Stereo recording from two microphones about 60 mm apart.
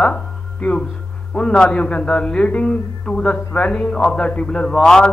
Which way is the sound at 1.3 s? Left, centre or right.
Centre.